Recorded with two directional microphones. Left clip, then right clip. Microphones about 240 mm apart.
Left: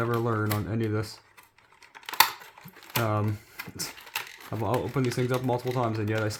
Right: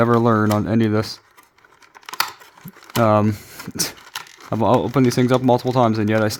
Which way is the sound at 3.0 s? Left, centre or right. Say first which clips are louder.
Right 14 dB; right.